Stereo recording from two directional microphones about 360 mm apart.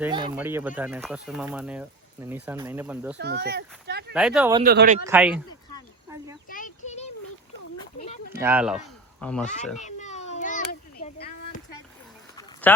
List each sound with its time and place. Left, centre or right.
0.0 s speech: centre
3.2 s speech: right
4.1 s speech: centre
4.6 s speech: right
5.0 s speech: centre
6.5 s a sound: left
8.3 s speech: centre
9.4 s speech: centre
9.8 s a sound: centre
12.4 s a sound: centre